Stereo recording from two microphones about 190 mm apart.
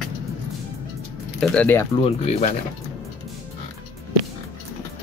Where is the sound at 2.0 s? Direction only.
35° left (ahead or behind).